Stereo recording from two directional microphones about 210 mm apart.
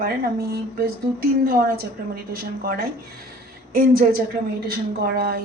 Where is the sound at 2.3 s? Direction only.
45° right (ahead or behind).